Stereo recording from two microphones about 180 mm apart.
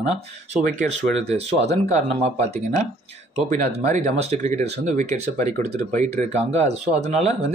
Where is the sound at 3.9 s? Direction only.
40° right (ahead or behind).